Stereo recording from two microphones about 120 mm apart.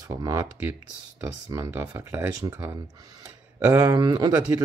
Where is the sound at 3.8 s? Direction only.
35° right (ahead or behind).